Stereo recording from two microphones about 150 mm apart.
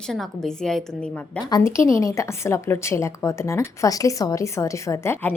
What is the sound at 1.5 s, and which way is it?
A woman's voice, 20° left (ahead or behind).